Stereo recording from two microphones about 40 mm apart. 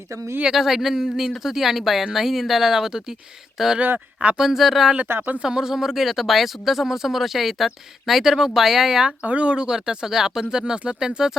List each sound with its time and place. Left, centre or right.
0.5 s speech: centre
3.8 s speech: right
4.4 s speech: centre
9.2 s speech: right; by 11.3 s centre